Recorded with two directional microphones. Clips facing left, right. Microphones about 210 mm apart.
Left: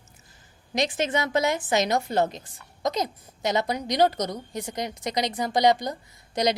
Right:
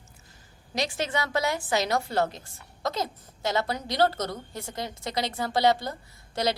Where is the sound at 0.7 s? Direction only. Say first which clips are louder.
Left 4 dB; 20° left (ahead or behind).